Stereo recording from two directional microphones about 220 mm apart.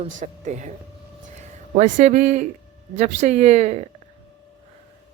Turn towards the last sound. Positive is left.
turn(degrees=-30)  # may be behind; listen again after turning